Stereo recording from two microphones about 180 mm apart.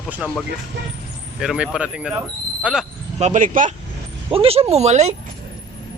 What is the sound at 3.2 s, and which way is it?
Speech, 45° right (ahead or behind).